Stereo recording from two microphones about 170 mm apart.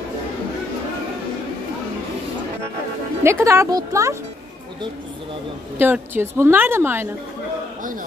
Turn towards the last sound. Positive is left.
turn(degrees=-15)  # may be behind; listen again after turning